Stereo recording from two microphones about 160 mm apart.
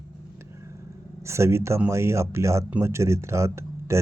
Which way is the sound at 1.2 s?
15° right (ahead or behind).